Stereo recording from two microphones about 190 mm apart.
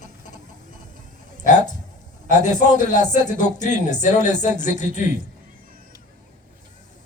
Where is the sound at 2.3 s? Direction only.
40° left (ahead or behind).